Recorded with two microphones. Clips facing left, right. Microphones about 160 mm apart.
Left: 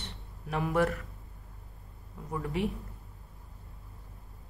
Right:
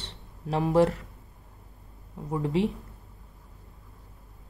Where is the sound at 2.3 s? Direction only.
25° right (ahead or behind).